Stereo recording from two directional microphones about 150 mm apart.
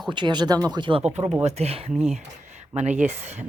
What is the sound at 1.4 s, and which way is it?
Speech, 45° right (ahead or behind).